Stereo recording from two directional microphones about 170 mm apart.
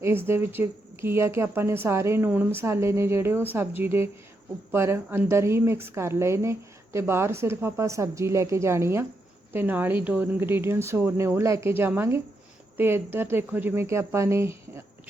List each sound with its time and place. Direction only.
0.0 s a woman's voice: 15° right (ahead or behind)